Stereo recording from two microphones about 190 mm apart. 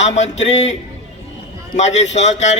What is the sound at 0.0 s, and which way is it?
Speech, 40° left (ahead or behind).